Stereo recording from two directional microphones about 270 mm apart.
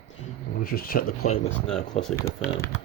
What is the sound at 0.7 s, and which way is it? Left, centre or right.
Speech, left.